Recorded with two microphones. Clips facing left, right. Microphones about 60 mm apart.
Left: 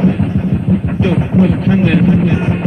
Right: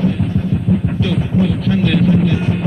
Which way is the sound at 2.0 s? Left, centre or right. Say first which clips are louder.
Left 2 dB; left.